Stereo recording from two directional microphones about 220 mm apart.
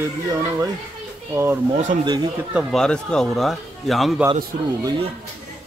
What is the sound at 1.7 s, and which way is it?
Speech, 35° right (ahead or behind).